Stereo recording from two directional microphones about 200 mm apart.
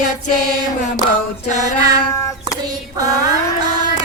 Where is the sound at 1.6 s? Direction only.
20° right (ahead or behind).